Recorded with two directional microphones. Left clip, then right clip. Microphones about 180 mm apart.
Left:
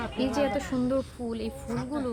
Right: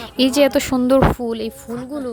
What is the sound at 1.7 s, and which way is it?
Speech, 20° right (ahead or behind).